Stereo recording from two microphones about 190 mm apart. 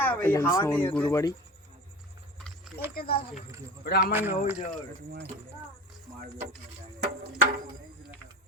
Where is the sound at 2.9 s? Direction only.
50° left (ahead or behind).